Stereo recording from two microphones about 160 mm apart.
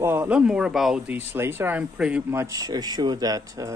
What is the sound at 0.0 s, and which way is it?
Speech, 10° right (ahead or behind).